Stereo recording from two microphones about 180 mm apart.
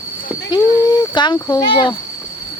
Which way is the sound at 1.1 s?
25° left (ahead or behind).